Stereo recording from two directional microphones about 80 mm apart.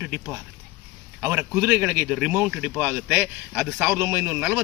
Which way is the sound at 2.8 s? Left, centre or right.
Right.